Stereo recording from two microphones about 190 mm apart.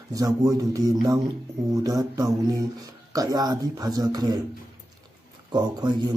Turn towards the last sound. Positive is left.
turn(degrees=-20)  # may be behind; listen again after turning